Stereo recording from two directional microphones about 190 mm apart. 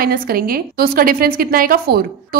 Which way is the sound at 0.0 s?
50° right (ahead or behind).